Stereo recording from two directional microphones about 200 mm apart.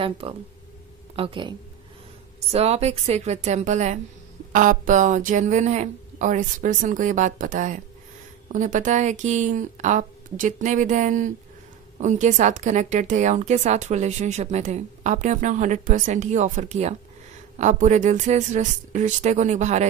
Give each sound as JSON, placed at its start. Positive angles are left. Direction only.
{"t": 0.2, "sound": "speech", "side_deg": -30}
{"t": 2.5, "sound": "a woman's voice", "side_deg": -30}